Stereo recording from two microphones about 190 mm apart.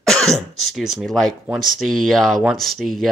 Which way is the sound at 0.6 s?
Centre (ahead or behind).